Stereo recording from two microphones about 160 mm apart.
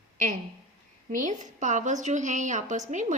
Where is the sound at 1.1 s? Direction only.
50° right (ahead or behind).